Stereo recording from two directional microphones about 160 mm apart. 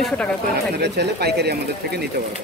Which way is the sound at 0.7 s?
90° right.